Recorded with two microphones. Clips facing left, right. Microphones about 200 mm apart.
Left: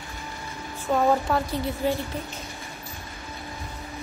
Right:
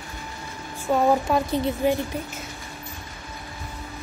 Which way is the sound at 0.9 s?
15° right (ahead or behind).